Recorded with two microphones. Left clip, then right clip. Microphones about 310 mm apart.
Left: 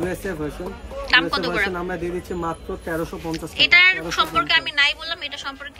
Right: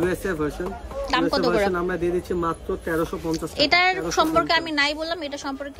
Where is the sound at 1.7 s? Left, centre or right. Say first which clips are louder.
Right 3 dB; centre.